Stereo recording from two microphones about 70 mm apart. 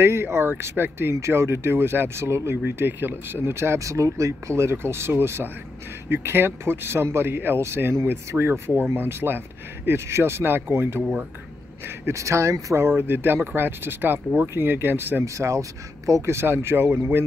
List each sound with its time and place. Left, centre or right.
0.0 s speech: right
12.1 s speech: right
12.7 s speech: right
15.2 s speech: right